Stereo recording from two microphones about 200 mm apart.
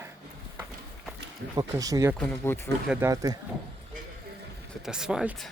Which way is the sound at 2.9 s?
15° right (ahead or behind).